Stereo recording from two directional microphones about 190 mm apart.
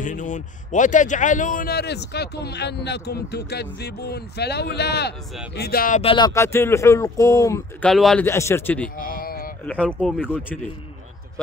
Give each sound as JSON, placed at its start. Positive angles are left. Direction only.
{"t": 0.0, "sound": "a man's voice", "side_deg": 40}
{"t": 5.9, "sound": "speech", "side_deg": 25}
{"t": 7.8, "sound": "speech", "side_deg": 0}
{"t": 8.3, "sound": "speech", "side_deg": 15}
{"t": 8.9, "sound": "a sound", "side_deg": 50}
{"t": 9.7, "sound": "speech", "side_deg": 5}